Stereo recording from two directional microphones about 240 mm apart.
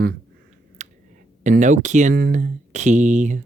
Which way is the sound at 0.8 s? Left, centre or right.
Right.